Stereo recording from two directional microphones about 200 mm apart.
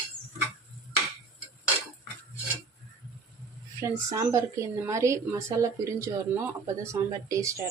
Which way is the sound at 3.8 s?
15° right (ahead or behind).